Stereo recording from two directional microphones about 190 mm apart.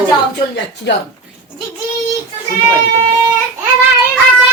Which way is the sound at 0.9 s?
65° left (ahead or behind).